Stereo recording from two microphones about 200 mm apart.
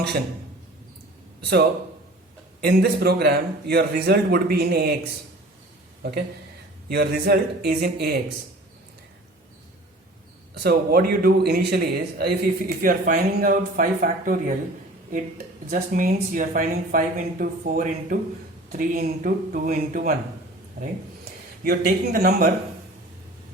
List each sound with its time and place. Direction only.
2.6 s a man's voice: 50° right (ahead or behind)
6.0 s a man's voice: 50° right (ahead or behind)
10.5 s a man's voice: 50° right (ahead or behind)
15.7 s a man's voice: 45° right (ahead or behind)